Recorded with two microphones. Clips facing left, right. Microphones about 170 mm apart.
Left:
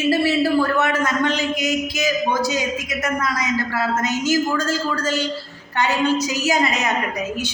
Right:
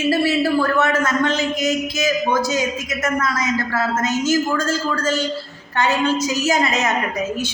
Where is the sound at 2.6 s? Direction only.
40° right (ahead or behind).